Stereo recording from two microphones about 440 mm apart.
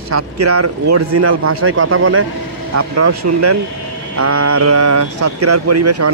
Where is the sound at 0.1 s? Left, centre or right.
Right.